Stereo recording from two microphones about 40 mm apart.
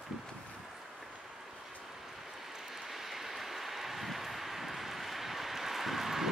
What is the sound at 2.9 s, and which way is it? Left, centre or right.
Vehicle, centre.